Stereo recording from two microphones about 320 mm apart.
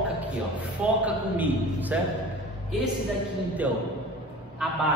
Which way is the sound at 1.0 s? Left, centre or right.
Centre.